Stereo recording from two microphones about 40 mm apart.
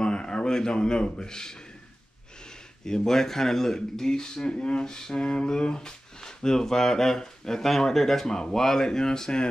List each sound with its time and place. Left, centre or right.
0.0 s speech: left
3.1 s speech: centre